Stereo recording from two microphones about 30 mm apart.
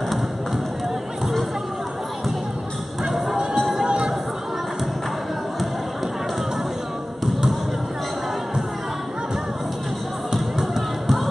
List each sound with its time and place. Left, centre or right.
3.1 s music: centre
3.8 s a sound: right
10.3 s basketball bounce: centre